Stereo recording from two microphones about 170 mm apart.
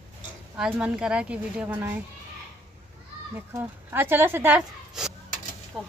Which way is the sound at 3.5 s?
10° right (ahead or behind).